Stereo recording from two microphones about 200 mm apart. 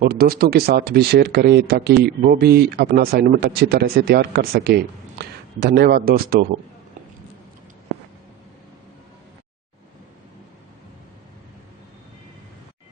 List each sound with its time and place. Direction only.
0.0 s speech: 50° right (ahead or behind)